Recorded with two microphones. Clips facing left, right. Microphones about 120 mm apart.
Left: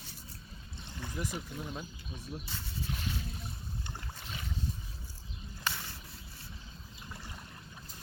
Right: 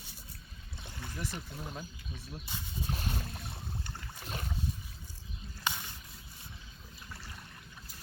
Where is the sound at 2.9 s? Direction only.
40° right (ahead or behind).